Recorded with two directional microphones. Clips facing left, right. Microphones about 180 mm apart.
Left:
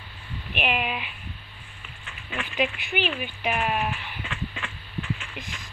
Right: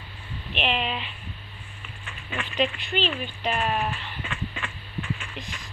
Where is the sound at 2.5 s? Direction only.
10° left (ahead or behind).